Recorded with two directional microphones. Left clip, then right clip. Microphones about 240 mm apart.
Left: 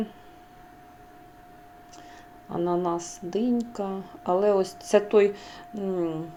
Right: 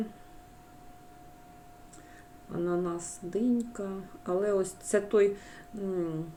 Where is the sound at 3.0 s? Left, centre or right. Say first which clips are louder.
Left 4 dB; centre.